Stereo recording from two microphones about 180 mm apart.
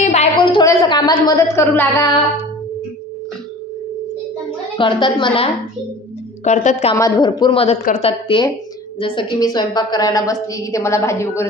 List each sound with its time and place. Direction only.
0.0 s a sound: 40° left (ahead or behind)
0.4 s a woman's voice: 25° left (ahead or behind)
4.7 s a woman's voice: 25° left (ahead or behind)
6.4 s speech: 40° left (ahead or behind)
7.0 s a woman's voice: 20° left (ahead or behind)